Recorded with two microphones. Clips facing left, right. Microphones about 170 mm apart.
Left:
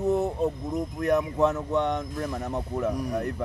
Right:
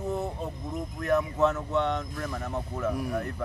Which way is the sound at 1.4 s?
15° left (ahead or behind).